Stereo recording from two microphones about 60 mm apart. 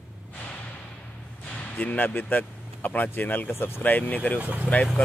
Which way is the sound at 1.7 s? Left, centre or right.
Left.